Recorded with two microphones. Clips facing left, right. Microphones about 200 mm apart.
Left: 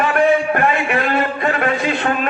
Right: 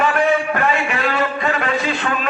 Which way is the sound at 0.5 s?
50° left (ahead or behind).